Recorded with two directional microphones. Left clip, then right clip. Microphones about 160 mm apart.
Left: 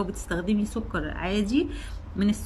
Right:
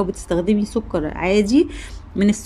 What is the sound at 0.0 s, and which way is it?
A woman's voice, 30° right (ahead or behind).